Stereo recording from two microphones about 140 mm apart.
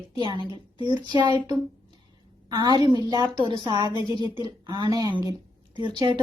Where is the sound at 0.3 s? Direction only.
35° right (ahead or behind).